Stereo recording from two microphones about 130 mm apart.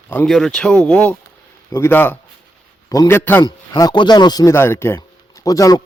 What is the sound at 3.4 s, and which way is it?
Speech, 35° left (ahead or behind).